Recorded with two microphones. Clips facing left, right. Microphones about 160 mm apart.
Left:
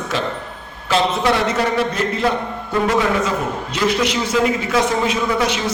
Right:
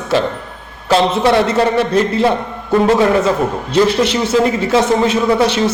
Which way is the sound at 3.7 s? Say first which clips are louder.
Right 6 dB; 30° right (ahead or behind).